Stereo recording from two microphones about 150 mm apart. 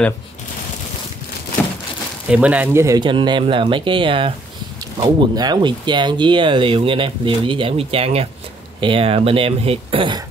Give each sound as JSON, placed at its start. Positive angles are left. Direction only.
{"t": 2.2, "sound": "speech", "side_deg": -10}
{"t": 3.0, "sound": "speech", "side_deg": -30}